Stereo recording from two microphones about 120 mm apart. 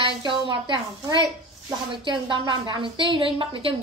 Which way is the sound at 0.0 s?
45° right (ahead or behind).